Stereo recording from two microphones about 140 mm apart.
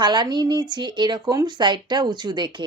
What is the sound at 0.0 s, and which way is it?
Speech, 30° right (ahead or behind).